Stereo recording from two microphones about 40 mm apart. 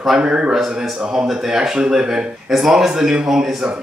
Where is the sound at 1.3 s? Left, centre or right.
Centre.